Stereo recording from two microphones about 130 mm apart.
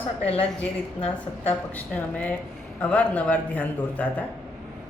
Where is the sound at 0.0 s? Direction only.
45° left (ahead or behind).